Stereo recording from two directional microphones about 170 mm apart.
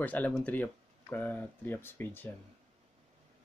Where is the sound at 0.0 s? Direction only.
10° left (ahead or behind).